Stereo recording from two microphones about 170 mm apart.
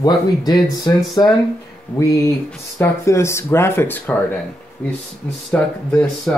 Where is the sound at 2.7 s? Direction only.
15° left (ahead or behind).